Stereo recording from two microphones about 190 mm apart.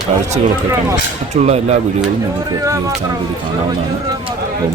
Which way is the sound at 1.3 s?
35° right (ahead or behind).